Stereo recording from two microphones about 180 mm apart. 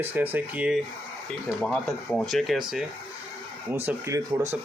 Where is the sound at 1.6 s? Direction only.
5° left (ahead or behind).